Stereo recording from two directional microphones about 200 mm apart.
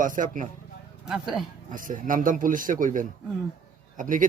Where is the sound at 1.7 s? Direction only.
40° right (ahead or behind).